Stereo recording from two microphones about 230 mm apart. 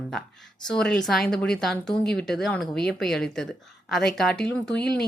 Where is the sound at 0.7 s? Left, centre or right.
Centre.